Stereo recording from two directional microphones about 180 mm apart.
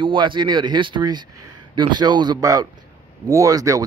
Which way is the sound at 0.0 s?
25° right (ahead or behind).